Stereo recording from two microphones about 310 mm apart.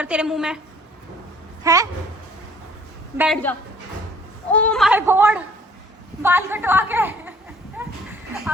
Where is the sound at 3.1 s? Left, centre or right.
Centre.